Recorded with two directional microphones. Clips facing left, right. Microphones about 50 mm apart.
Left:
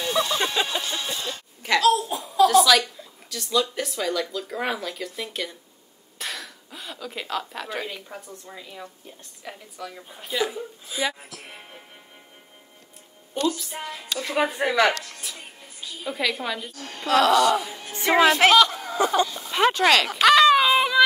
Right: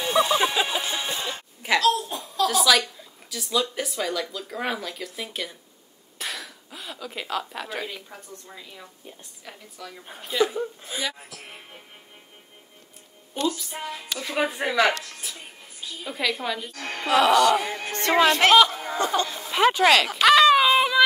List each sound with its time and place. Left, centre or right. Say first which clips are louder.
0.0 s a sound: right 3 dB; centre
0.4 s music: right 1 dB; centre; by 1.4 s right
1.6 s hiccup: even; centre
2.0 s a sound: left 6 dB; centre
3.0 s speech: left 1 dB; centre
13.3 s speech: left 1 dB; centre
16.7 s speech: right 5 dB; right
17.1 s speech: even; centre
17.5 s speech: right 1 dB; right
18.0 s speech: left 2 dB; centre
18.9 s a sound: left 3 dB; centre
19.4 s a sound: right 3 dB; centre